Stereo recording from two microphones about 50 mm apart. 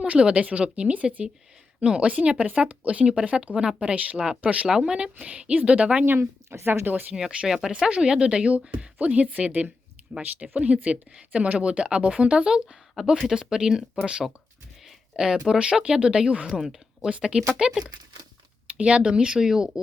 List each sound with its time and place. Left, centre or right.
0.1 s speech: right
6.1 s speech: right
6.8 s speech: right
7.1 s speech: right
7.4 s speech: centre
7.9 s speech: centre
16.6 s speech: centre
17.1 s speech: centre